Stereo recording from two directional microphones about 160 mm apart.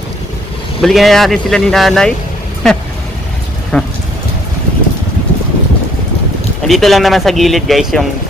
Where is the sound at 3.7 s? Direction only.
5° left (ahead or behind).